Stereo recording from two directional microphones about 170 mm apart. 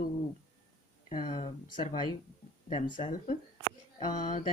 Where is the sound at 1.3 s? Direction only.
45° left (ahead or behind).